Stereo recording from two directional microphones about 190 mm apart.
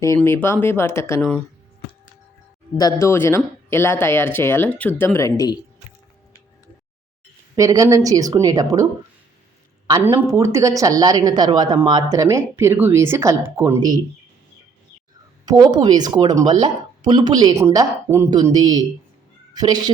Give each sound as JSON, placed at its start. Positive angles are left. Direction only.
{"t": 0.2, "sound": "speech", "side_deg": 10}
{"t": 2.7, "sound": "speech", "side_deg": 15}
{"t": 7.5, "sound": "speech", "side_deg": -15}
{"t": 10.0, "sound": "speech", "side_deg": -15}
{"t": 15.4, "sound": "speech", "side_deg": -20}